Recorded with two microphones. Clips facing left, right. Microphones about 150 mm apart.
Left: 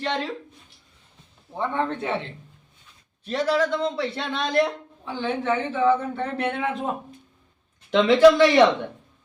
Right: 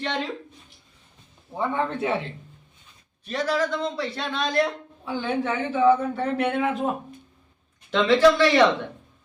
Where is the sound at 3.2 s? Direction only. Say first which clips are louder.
Left 2 dB; 25° left (ahead or behind).